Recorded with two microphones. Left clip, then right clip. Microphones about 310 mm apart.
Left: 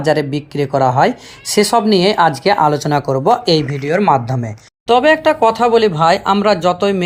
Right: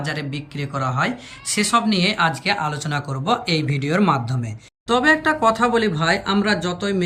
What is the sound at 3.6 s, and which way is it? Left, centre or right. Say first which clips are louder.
Speech: left 4 dB; left.